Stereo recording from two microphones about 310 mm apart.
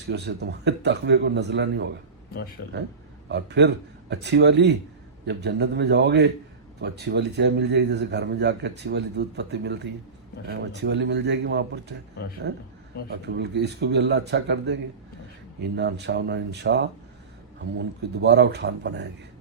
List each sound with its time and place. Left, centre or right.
0.1 s a man's voice: right
2.6 s speech: left
3.2 s a man's voice: right